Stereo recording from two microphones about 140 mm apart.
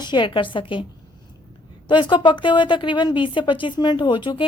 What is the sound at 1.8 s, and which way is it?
A woman's voice, 35° left (ahead or behind).